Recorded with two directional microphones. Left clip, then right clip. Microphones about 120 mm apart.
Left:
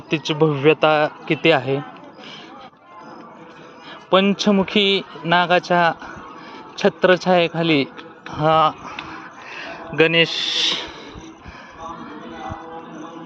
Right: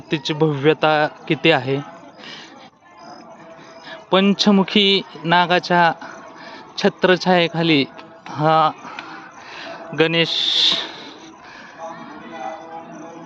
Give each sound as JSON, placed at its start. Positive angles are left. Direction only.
{"t": 0.1, "sound": "a man's voice", "side_deg": -30}
{"t": 3.8, "sound": "a man's voice", "side_deg": -40}
{"t": 9.1, "sound": "a sound", "side_deg": -20}